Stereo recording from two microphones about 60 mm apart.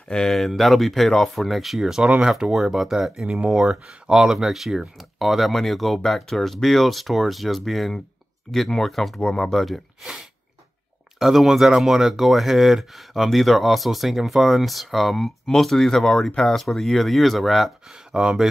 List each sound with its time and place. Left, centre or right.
0.1 s speech: centre
9.2 s speech: centre
9.5 s speech: centre
11.1 s speech: centre
18.1 s speech: centre